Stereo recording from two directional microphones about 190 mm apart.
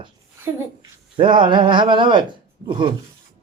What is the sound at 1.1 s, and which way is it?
Speech, 25° right (ahead or behind).